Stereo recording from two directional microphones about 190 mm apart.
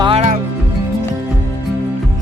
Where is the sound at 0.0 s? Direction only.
30° right (ahead or behind).